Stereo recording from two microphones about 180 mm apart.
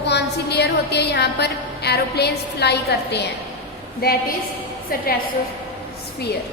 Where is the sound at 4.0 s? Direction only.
55° left (ahead or behind).